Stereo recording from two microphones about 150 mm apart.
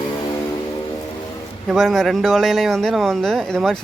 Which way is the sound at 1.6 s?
Centre (ahead or behind).